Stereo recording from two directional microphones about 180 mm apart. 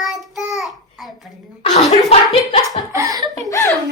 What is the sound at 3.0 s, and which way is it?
Speech, 20° right (ahead or behind).